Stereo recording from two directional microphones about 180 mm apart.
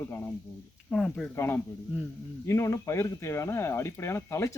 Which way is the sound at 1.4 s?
15° left (ahead or behind).